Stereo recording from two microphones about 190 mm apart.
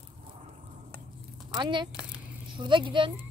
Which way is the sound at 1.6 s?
25° right (ahead or behind).